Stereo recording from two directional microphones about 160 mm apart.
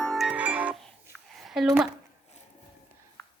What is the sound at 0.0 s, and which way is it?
Music, centre (ahead or behind).